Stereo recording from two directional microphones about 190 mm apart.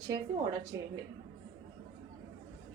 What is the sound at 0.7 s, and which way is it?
Speech, 15° right (ahead or behind).